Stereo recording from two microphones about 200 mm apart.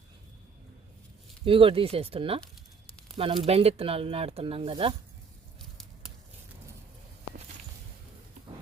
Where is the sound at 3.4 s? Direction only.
30° right (ahead or behind).